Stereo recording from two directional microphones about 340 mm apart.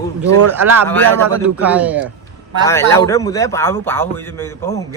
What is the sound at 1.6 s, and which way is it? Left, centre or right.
Speech, centre.